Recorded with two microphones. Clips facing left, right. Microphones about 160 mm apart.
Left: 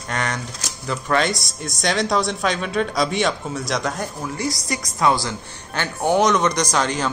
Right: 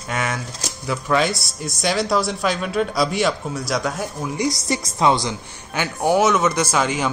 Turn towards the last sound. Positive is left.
turn(degrees=-10)  # may be behind; listen again after turning